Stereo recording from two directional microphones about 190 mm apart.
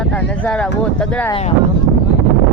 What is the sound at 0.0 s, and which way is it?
Speech, 5° left (ahead or behind).